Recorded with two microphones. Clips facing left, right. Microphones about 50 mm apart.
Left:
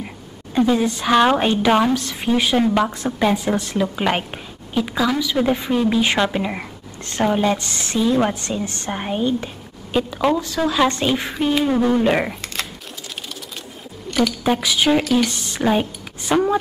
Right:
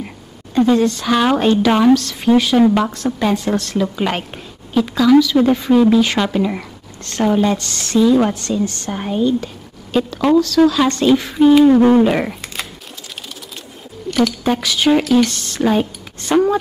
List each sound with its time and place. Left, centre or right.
0.6 s a woman's voice: centre
6.6 s a sound: left
7.2 s a woman's voice: centre
9.9 s speech: centre
10.4 s a woman's voice: left
11.3 s a sound: centre
12.0 s speech: centre
14.1 s speech: centre